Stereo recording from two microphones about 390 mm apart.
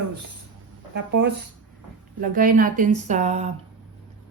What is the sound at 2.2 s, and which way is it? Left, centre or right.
A woman's voice, right.